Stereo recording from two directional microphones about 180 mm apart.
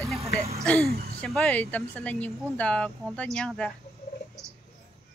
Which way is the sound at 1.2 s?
5° left (ahead or behind).